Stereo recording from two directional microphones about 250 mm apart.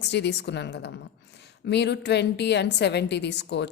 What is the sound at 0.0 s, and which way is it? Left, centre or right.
A woman's voice, left.